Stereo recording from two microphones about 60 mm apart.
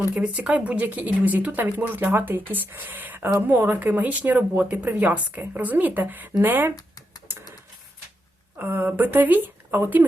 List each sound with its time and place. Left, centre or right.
0.1 s speech: centre; by 6.7 s right
8.5 s speech: right